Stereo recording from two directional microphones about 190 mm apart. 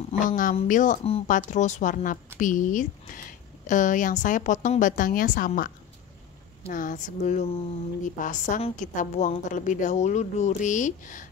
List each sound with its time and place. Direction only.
0.3 s a woman's voice: 45° left (ahead or behind)
6.7 s a woman's voice: 45° left (ahead or behind)